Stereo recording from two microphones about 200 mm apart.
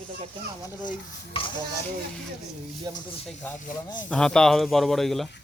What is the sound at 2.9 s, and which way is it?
Speech, 20° right (ahead or behind).